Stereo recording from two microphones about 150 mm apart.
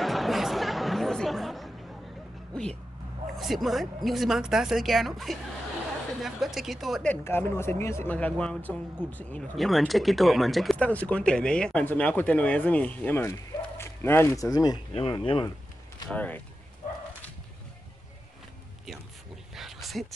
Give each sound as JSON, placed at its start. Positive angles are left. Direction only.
{"t": 0.0, "sound": "chatter", "side_deg": 0}
{"t": 2.5, "sound": "vehicle", "side_deg": 5}
{"t": 3.3, "sound": "speech", "side_deg": 0}
{"t": 7.2, "sound": "speech", "side_deg": 15}
{"t": 16.1, "sound": "speech", "side_deg": 10}
{"t": 19.5, "sound": "a sound", "side_deg": 0}